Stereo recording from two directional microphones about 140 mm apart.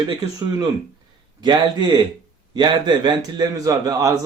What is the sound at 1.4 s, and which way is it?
A man's voice, 30° right (ahead or behind).